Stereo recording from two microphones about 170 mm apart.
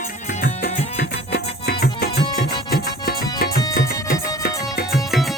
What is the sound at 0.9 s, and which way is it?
Music, 65° left (ahead or behind).